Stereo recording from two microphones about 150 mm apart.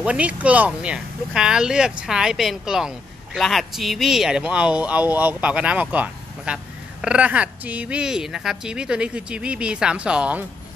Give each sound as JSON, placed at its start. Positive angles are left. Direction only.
{"t": 0.0, "sound": "speech", "side_deg": -10}